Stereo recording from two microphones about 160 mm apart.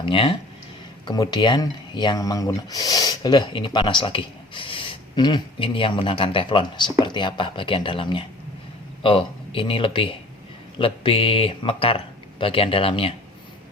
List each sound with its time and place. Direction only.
0.0 s speech: 35° left (ahead or behind)